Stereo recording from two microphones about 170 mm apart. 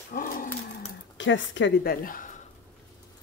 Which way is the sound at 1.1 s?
90° left.